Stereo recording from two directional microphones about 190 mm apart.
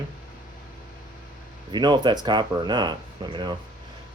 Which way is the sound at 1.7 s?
25° right (ahead or behind).